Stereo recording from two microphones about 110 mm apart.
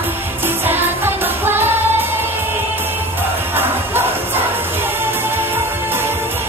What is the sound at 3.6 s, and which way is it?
Music, 20° right (ahead or behind).